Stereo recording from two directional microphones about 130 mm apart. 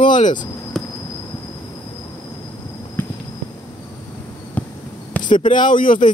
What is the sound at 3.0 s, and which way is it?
Clip-clop, 15° left (ahead or behind).